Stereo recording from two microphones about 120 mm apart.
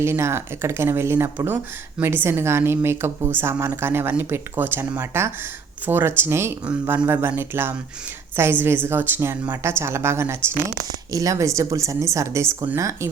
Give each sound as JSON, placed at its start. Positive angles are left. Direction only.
{"t": 0.0, "sound": "a woman's voice", "side_deg": -20}